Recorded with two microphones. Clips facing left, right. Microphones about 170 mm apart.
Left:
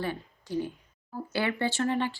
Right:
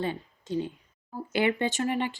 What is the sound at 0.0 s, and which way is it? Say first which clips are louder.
Speech: right 2 dB; 20° right (ahead or behind).